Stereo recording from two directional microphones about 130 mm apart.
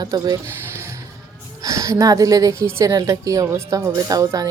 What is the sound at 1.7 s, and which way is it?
A woman's voice, 25° right (ahead or behind).